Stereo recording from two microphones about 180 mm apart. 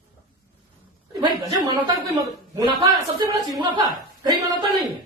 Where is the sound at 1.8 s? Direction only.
25° right (ahead or behind).